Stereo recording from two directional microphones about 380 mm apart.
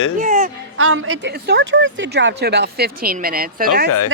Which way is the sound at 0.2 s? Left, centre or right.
Centre.